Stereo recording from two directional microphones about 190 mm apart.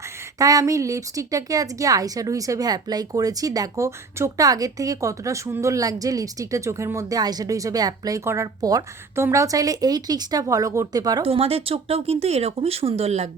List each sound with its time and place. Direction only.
0.3 s a woman's voice: 20° right (ahead or behind); by 13.3 s 35° right (ahead or behind)